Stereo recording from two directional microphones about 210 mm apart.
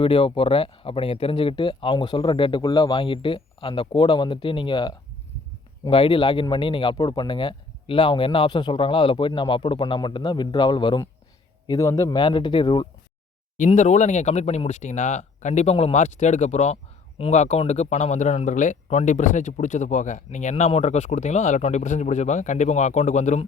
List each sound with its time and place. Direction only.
0.0 s speech: 25° left (ahead or behind)
13.6 s speech: 35° left (ahead or behind)